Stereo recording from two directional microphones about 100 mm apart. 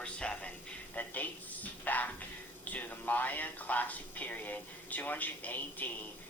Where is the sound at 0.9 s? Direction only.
15° left (ahead or behind).